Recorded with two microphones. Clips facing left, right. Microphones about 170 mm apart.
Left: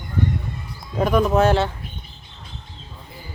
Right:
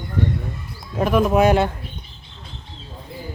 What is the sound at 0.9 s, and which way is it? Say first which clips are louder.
Speech: right 1 dB; 5° right (ahead or behind).